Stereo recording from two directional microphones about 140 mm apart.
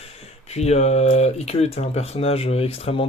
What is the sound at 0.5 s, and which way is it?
Speech, 50° left (ahead or behind).